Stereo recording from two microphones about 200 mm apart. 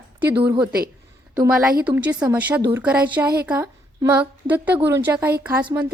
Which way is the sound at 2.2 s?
10° right (ahead or behind).